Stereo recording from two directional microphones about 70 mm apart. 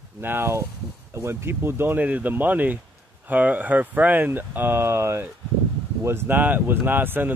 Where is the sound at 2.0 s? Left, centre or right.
Right.